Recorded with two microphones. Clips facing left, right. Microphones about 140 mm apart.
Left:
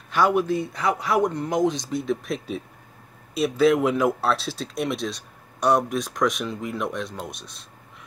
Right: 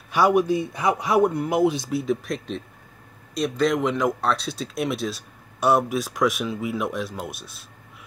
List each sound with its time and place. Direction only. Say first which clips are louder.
0.1 s speech: right 2 dB; 10° right (ahead or behind)